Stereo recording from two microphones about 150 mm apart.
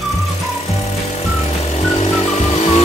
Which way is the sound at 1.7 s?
40° left (ahead or behind).